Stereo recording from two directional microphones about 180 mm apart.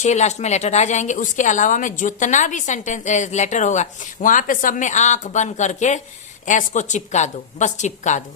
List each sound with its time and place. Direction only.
0.0 s a woman's voice: 40° left (ahead or behind)